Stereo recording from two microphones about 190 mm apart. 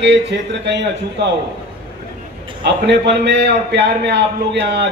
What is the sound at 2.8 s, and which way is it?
A man's voice, 65° right (ahead or behind).